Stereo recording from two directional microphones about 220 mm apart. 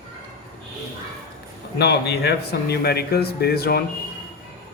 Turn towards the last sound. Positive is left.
turn(degrees=45)  # may be behind; listen again after turning